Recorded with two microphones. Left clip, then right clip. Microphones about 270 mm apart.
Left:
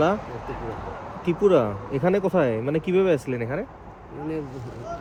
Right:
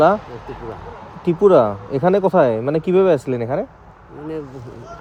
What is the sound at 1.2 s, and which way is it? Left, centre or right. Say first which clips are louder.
Speech: right 7 dB; right.